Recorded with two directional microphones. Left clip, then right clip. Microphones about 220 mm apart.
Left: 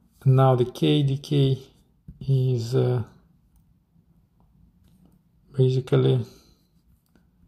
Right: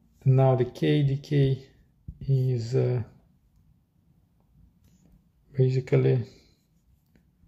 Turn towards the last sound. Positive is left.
turn(degrees=15)  # may be behind; listen again after turning